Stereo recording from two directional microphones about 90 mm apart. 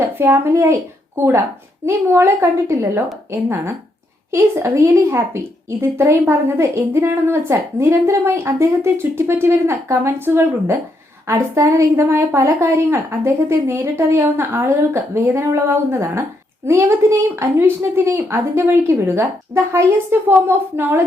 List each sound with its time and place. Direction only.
0.2 s a woman's voice: 30° right (ahead or behind)